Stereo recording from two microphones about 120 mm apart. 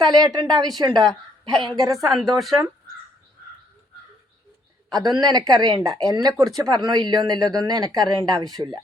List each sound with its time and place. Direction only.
0.0 s speech: 35° right (ahead or behind)
1.0 s a woman's voice: 5° left (ahead or behind)
4.9 s speech: 35° right (ahead or behind)